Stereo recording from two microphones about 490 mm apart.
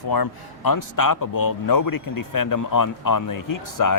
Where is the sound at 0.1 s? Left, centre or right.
Left.